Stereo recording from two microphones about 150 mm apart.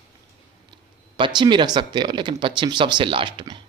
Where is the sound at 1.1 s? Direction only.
30° right (ahead or behind).